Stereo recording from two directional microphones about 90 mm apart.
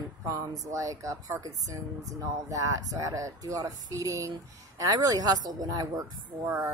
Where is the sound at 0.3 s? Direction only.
40° right (ahead or behind).